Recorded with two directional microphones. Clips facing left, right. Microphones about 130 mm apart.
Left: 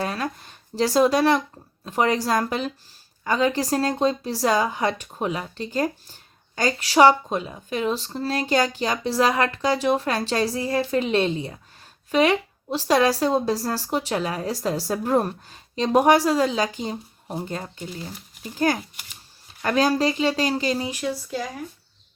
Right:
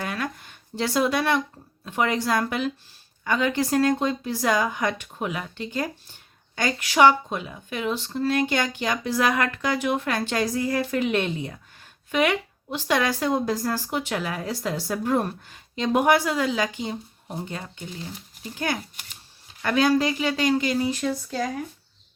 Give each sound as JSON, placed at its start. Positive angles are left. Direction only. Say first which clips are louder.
{"t": 0.0, "sound": "a sound", "louder": "left 3 dB", "side_deg": 35}
{"t": 1.8, "sound": "speech", "louder": "left 3 dB", "side_deg": 35}
{"t": 21.0, "sound": "speech", "louder": "right 1 dB", "side_deg": 5}